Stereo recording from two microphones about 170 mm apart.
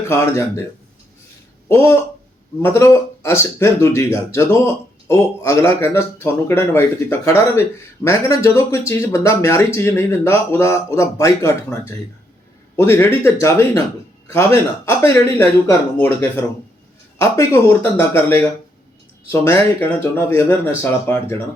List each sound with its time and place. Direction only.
0.1 s speech: 15° left (ahead or behind)
1.6 s speech: 15° left (ahead or behind)
19.6 s speech: 15° left (ahead or behind)